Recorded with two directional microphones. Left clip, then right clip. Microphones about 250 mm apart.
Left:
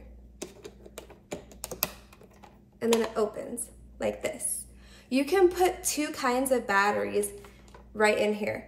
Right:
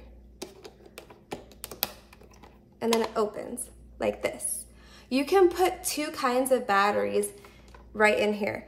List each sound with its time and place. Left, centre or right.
0.4 s computer keyboard: centre
2.8 s speech: centre